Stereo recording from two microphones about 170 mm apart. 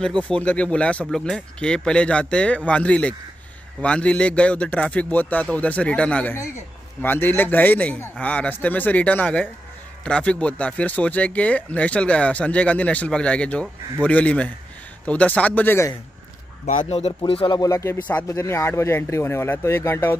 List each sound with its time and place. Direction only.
0.2 s speech: 5° left (ahead or behind)
16.6 s speech: 40° left (ahead or behind)
17.6 s speech: 20° left (ahead or behind)